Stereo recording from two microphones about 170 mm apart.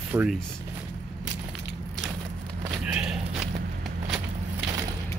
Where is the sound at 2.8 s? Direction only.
5° right (ahead or behind).